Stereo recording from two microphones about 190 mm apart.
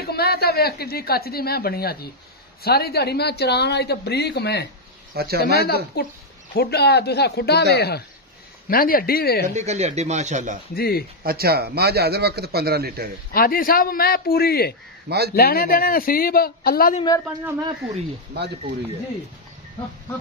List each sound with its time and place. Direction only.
0.0 s a woman's voice: 55° left (ahead or behind)
5.1 s speech: 55° right (ahead or behind)
5.4 s a woman's voice: 55° left (ahead or behind)
9.5 s speech: 35° right (ahead or behind)
10.7 s a man's voice: 55° left (ahead or behind)
11.2 s a man's voice: 55° right (ahead or behind)
13.3 s a man's voice: 50° left (ahead or behind)
15.0 s a man's voice: 55° right (ahead or behind)
15.3 s a man's voice: 55° left (ahead or behind)
17.8 s speech: centre (ahead or behind)